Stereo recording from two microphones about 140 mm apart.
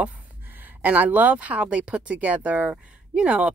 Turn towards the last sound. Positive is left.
turn(degrees=-10)  # may be behind; listen again after turning